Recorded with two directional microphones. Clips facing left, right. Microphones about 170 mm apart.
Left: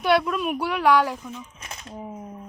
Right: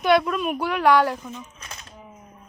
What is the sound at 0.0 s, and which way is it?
Speech, 5° left (ahead or behind).